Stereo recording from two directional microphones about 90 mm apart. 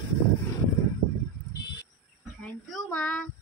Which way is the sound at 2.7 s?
10° left (ahead or behind).